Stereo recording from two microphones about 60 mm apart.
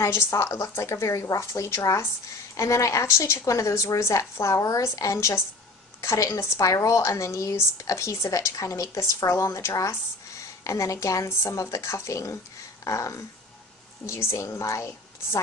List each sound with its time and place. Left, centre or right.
0.0 s a woman's voice: left
4.0 s speech: left
10.6 s speech: left
12.8 s a sound: left
14.1 s speech: left